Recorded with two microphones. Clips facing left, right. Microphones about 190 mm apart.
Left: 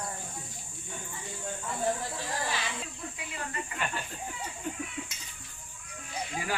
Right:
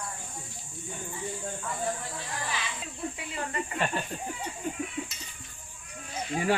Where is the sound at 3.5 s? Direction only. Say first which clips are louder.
Right 5 dB; 30° right (ahead or behind).